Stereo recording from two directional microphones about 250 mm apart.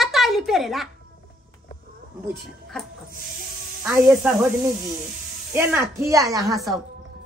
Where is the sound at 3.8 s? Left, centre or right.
Centre.